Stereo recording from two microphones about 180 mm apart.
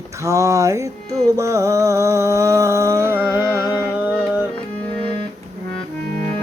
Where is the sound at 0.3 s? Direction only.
15° right (ahead or behind).